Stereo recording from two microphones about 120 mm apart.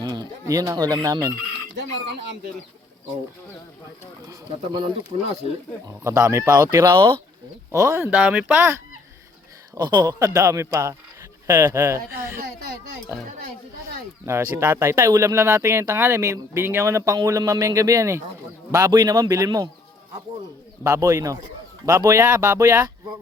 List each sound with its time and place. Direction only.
0.0 s speech: 35° right (ahead or behind)
4.3 s a man's voice: 35° right (ahead or behind)
5.8 s speech: 25° right (ahead or behind)
9.7 s speech: 35° right (ahead or behind)
14.3 s a man's voice: 20° right (ahead or behind)
20.8 s speech: 30° right (ahead or behind)